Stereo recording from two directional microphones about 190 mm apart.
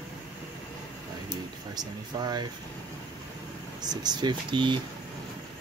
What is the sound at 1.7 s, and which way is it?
Speech, 20° right (ahead or behind).